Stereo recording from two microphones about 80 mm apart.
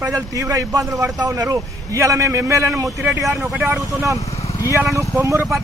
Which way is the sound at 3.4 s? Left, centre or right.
Centre.